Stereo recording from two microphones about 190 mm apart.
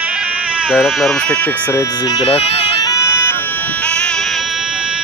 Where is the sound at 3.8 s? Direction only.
5° left (ahead or behind).